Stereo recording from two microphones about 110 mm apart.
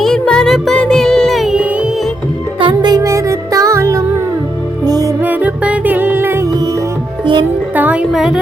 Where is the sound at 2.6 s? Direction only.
50° right (ahead or behind).